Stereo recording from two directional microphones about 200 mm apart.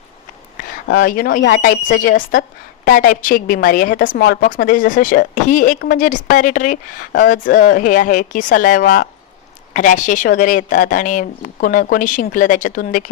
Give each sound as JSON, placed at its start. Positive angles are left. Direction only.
{"t": 0.9, "sound": "a woman's voice", "side_deg": 45}